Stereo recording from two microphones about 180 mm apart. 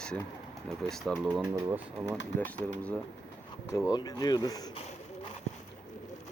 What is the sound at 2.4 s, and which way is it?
Speech, 10° left (ahead or behind).